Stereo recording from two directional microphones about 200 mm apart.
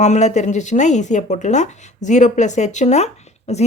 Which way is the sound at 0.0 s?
35° left (ahead or behind).